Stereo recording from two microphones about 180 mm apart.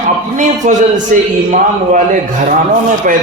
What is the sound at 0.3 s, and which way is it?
Speech, 45° right (ahead or behind).